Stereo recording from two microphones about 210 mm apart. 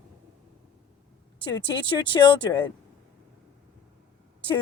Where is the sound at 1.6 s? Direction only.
25° left (ahead or behind).